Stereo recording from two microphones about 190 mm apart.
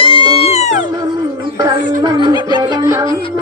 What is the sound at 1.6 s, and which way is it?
Music, 20° right (ahead or behind).